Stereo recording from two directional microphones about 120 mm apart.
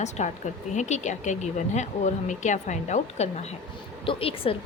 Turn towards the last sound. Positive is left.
turn(degrees=50)  # may be behind; listen again after turning